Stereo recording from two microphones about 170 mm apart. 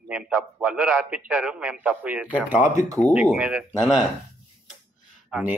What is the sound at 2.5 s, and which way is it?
Speech, 50° left (ahead or behind).